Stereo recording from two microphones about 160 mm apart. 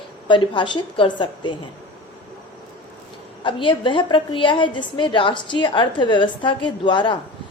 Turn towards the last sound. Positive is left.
turn(degrees=30)  # may be behind; listen again after turning